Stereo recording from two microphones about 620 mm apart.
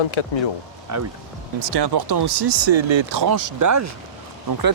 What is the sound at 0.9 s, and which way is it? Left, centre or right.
Speech, right.